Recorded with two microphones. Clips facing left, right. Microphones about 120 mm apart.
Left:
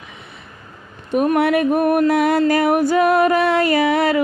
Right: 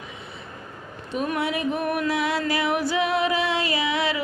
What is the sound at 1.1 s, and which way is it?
Music, 55° left (ahead or behind).